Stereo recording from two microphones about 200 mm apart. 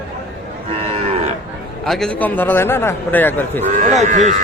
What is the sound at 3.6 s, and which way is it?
Speech, 40° right (ahead or behind).